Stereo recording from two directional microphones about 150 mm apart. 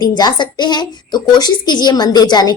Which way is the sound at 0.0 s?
30° left (ahead or behind).